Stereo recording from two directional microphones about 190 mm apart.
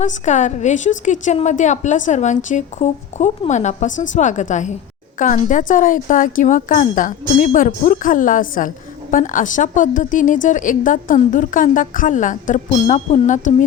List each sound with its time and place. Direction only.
0.0 s a woman's voice: 40° left (ahead or behind)